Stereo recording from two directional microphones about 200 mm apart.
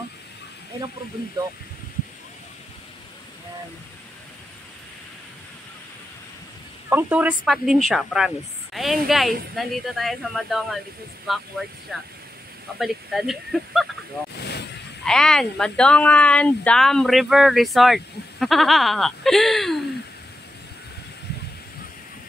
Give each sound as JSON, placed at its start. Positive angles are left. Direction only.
{"t": 6.9, "sound": "speech", "side_deg": -10}
{"t": 14.3, "sound": "vehicle", "side_deg": 55}
{"t": 15.0, "sound": "speech", "side_deg": 5}